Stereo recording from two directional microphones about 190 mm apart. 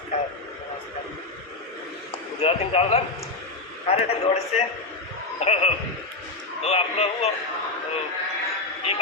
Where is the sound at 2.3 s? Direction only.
30° left (ahead or behind).